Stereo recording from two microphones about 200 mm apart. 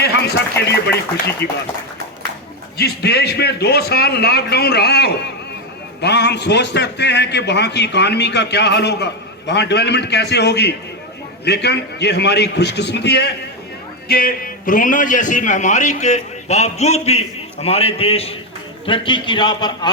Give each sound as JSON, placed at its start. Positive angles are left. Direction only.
{"t": 0.0, "sound": "speech", "side_deg": 55}
{"t": 2.7, "sound": "a man's voice", "side_deg": 55}
{"t": 14.1, "sound": "a man's voice", "side_deg": 45}